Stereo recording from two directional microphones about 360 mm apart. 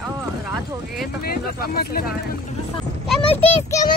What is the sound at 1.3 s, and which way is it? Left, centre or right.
Speech, left.